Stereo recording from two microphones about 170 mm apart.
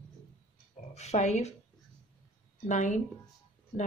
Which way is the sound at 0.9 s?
40° left (ahead or behind).